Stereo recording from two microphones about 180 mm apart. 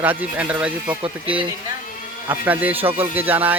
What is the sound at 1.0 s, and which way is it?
Speech, 30° right (ahead or behind).